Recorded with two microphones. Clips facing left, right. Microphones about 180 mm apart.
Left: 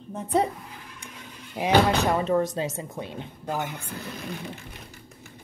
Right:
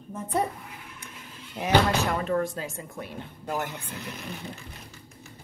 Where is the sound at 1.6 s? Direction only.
15° left (ahead or behind).